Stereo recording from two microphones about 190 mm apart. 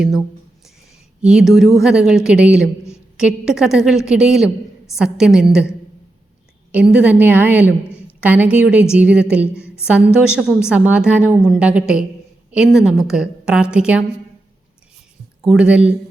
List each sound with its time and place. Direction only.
0.0 s a sound: centre (ahead or behind)
1.2 s a woman's voice: 5° right (ahead or behind)
6.7 s a woman's voice: 5° right (ahead or behind)
7.9 s a sound: 10° left (ahead or behind)
8.2 s a woman's voice: 10° right (ahead or behind)
15.4 s a woman's voice: centre (ahead or behind)